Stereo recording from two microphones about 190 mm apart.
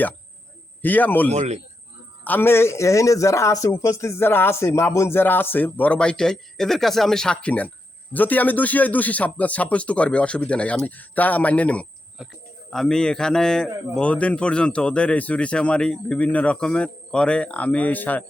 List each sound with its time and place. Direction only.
0.8 s a man's voice: 10° left (ahead or behind)
1.3 s a man's voice: 35° right (ahead or behind)
2.2 s a man's voice: 10° left (ahead or behind)